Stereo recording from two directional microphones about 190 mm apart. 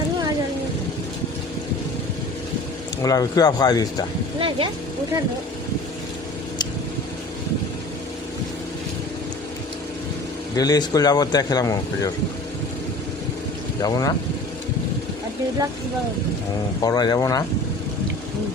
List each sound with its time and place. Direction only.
3.0 s speech: 20° left (ahead or behind)
4.4 s speech: 30° right (ahead or behind)
10.5 s speech: 20° left (ahead or behind)
13.8 s speech: 20° left (ahead or behind)
16.8 s speech: 20° left (ahead or behind)